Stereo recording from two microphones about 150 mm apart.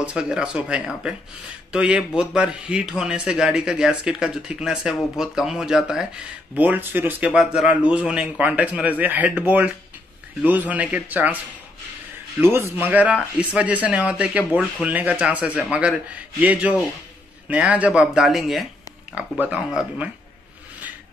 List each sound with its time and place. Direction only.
0.0 s a man's voice: 5° right (ahead or behind)
10.4 s a man's voice: 10° right (ahead or behind)
12.4 s a man's voice: 15° right (ahead or behind)